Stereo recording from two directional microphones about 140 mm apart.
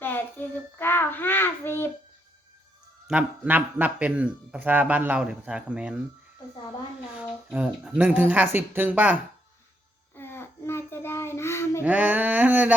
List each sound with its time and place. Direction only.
0.0 s child singing: 15° left (ahead or behind)
0.8 s a sound: 15° left (ahead or behind)
3.1 s a man's voice: 10° right (ahead or behind)
7.2 s a man's voice: 10° right (ahead or behind)
10.2 s child singing: 15° left (ahead or behind)
11.8 s a sound: 10° right (ahead or behind)